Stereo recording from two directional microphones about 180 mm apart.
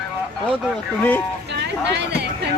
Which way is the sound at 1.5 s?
70° right (ahead or behind).